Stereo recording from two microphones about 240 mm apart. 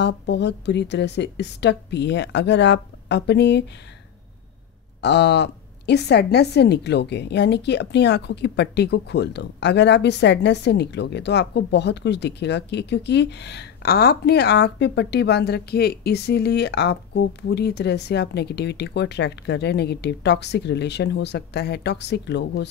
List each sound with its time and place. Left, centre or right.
0.0 s a woman's voice: left
5.0 s a woman's voice: left